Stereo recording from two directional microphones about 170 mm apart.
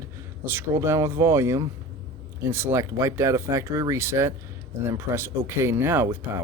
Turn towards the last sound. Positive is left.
turn(degrees=-10)  # may be behind; listen again after turning